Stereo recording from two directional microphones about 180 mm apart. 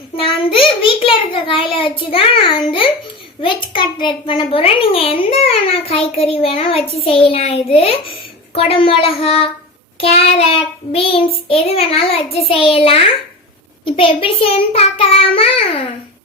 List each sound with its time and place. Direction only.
0.5 s a child's voice: 30° left (ahead or behind)